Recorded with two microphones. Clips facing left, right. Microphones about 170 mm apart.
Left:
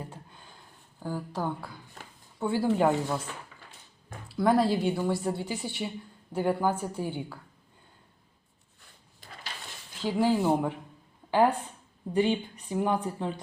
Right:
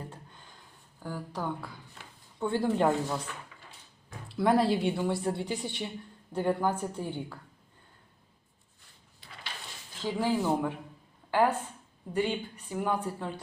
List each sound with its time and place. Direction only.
1.0 s speech: 15° left (ahead or behind)
2.4 s a woman's voice: 5° left (ahead or behind)
4.3 s a woman's voice: centre (ahead or behind)
10.2 s speech: 15° left (ahead or behind)